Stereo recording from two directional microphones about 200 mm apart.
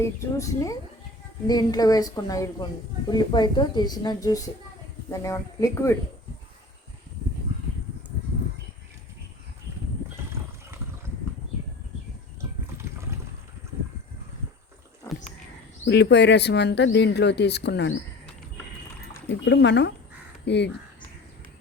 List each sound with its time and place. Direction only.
0.0 s speech: 15° left (ahead or behind)
15.9 s speech: 60° left (ahead or behind)
19.3 s speech: 60° left (ahead or behind)